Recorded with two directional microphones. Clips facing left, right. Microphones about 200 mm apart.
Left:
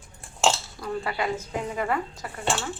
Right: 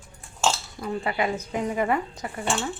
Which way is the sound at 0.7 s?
20° right (ahead or behind).